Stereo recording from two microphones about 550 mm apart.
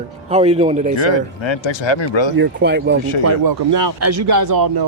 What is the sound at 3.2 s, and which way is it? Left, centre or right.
A man's voice, right.